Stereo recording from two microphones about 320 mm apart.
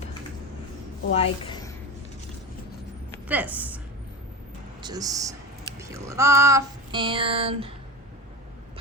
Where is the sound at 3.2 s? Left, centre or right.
Centre.